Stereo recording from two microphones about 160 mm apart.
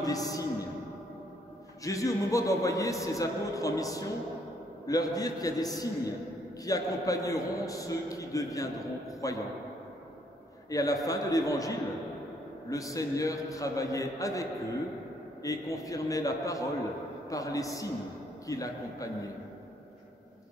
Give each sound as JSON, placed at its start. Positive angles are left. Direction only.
{"t": 0.0, "sound": "a man's voice", "side_deg": 20}
{"t": 1.9, "sound": "a man's voice", "side_deg": 20}
{"t": 10.7, "sound": "a man's voice", "side_deg": 20}